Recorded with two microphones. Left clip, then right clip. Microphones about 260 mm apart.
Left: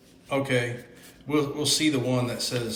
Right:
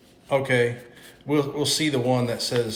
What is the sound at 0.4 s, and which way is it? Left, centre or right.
Speech, centre.